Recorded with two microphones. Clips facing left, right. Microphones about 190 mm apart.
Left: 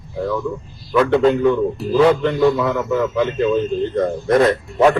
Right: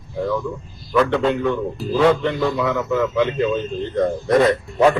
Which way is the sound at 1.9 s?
Centre (ahead or behind).